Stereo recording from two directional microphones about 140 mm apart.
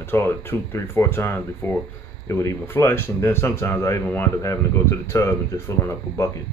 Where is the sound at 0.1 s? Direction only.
15° left (ahead or behind).